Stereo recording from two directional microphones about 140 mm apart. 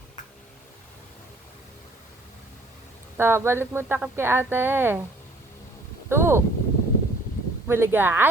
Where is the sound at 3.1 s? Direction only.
15° right (ahead or behind).